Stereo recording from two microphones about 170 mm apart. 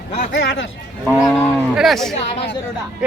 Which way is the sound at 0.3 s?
90° left.